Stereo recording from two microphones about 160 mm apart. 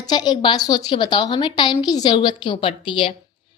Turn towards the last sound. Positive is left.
turn(degrees=30)  # may be behind; listen again after turning